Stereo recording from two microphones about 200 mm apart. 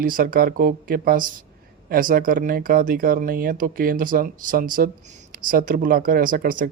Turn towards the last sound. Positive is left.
turn(degrees=-45)  # may be behind; listen again after turning